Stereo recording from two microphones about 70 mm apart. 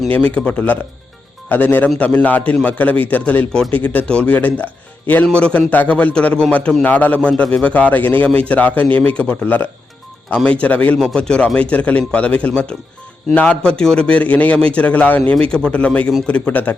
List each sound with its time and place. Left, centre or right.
0.1 s a man's voice: centre
10.9 s a man's voice: centre